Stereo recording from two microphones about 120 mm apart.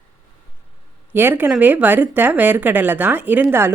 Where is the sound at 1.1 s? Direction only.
15° right (ahead or behind).